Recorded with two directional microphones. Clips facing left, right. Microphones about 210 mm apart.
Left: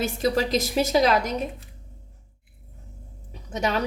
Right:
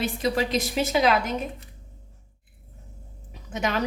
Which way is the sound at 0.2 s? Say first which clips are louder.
Left 3 dB; 40° left (ahead or behind).